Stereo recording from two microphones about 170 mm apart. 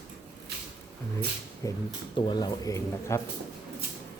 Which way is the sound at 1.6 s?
20° left (ahead or behind).